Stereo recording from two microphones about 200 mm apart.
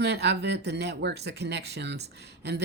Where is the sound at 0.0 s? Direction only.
55° right (ahead or behind).